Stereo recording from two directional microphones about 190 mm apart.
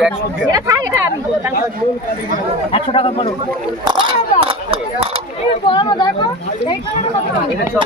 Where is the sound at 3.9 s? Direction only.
25° right (ahead or behind).